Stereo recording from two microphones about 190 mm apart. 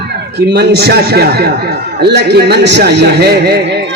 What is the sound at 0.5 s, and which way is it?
A man's voice, 55° right (ahead or behind).